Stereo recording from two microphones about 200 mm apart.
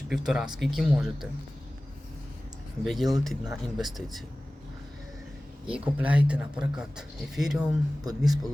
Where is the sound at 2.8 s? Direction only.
Centre (ahead or behind).